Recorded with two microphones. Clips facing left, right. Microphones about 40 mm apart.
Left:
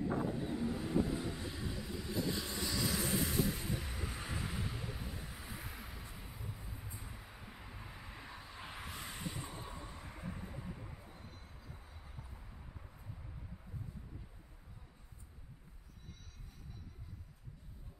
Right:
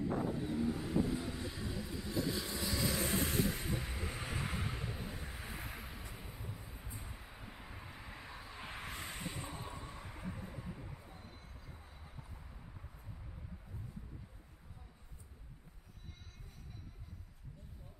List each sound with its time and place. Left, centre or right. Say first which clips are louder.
0.0 s vehicle: even; centre
3.1 s music: even; right
4.6 s vehicle: right 1 dB; centre
9.6 s a sound: right 1 dB; centre